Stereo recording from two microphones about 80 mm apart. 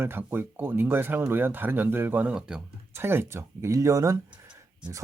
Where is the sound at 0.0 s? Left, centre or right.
Right.